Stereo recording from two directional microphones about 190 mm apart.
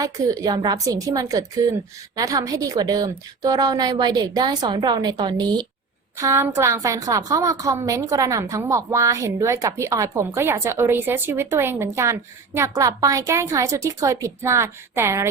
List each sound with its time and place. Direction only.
0.0 s a woman's voice: 20° right (ahead or behind)